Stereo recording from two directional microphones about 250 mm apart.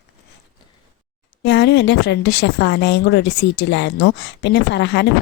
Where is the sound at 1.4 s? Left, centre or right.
Left.